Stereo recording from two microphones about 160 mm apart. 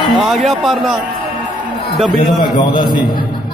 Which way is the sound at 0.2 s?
Centre (ahead or behind).